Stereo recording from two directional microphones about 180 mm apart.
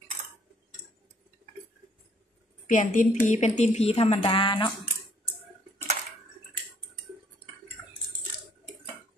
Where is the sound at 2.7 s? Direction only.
45° left (ahead or behind); by 4.7 s 30° left (ahead or behind).